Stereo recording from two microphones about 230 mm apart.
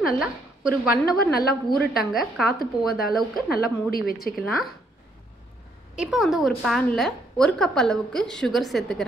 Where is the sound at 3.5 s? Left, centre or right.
Left.